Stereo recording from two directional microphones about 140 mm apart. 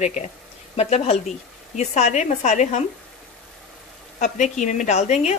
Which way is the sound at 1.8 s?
55° left (ahead or behind).